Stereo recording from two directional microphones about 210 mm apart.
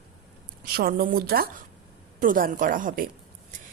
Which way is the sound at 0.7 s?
45° right (ahead or behind).